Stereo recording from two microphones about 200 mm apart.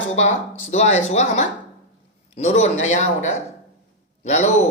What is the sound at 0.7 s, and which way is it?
A man's voice, 35° left (ahead or behind).